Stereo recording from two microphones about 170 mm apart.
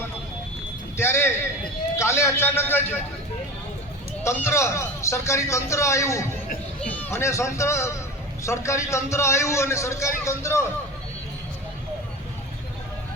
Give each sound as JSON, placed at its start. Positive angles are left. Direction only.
{"t": 0.9, "sound": "a sound", "side_deg": 15}
{"t": 2.0, "sound": "a man's voice", "side_deg": 15}
{"t": 4.2, "sound": "a man's voice", "side_deg": 15}